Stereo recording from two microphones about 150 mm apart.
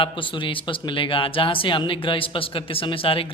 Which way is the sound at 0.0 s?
35° left (ahead or behind).